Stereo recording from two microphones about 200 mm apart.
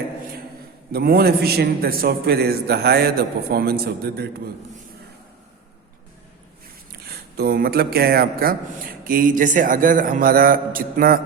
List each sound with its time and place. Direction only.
0.9 s speech: 50° right (ahead or behind)
7.0 s speech: 50° right (ahead or behind)